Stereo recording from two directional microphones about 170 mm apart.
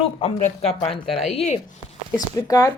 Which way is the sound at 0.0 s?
35° left (ahead or behind).